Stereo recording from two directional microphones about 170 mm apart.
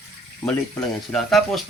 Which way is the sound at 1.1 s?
Centre (ahead or behind).